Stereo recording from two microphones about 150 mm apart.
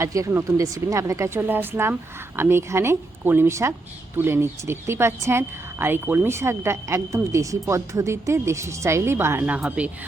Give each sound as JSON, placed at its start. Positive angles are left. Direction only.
{"t": 0.0, "sound": "speech", "side_deg": -20}